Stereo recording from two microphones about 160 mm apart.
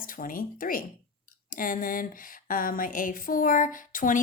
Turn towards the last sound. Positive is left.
turn(degrees=55)  # may be behind; listen again after turning